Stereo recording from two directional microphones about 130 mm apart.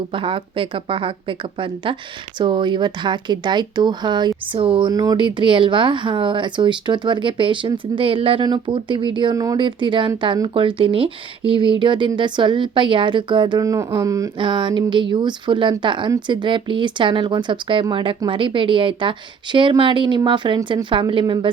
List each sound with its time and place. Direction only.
0.1 s speech: 40° right (ahead or behind)
4.9 s speech: 30° right (ahead or behind)
9.3 s speech: 25° right (ahead or behind)
9.6 s speech: 40° right (ahead or behind)
14.3 s speech: 40° right (ahead or behind)